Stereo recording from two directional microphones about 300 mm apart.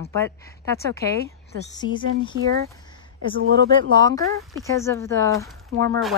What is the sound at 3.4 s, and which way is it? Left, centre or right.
Speech, right.